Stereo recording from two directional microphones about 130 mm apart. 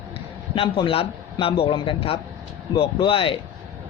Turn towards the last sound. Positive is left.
turn(degrees=40)  # may be behind; listen again after turning